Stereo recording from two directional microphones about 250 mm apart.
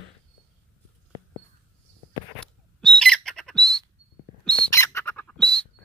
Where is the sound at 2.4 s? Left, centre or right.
Centre.